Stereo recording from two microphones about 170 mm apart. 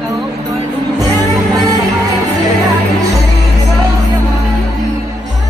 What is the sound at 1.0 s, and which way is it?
Music, 20° right (ahead or behind).